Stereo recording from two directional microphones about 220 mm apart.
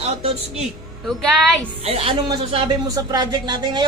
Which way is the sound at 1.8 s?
25° right (ahead or behind).